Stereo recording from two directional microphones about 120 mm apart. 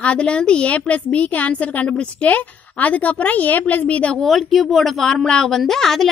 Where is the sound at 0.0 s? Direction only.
10° left (ahead or behind).